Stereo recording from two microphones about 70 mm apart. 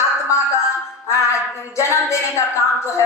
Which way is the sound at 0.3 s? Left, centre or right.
Left.